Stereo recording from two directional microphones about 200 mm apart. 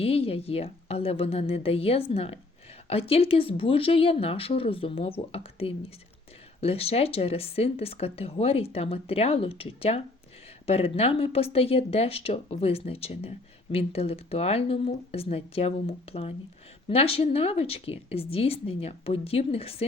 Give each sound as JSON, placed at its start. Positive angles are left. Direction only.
{"t": 0.0, "sound": "speech", "side_deg": 30}